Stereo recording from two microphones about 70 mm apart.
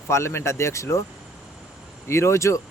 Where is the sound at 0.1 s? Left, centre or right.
Left.